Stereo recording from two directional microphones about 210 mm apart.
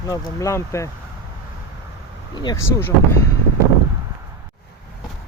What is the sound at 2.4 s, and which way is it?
Speech, 20° left (ahead or behind).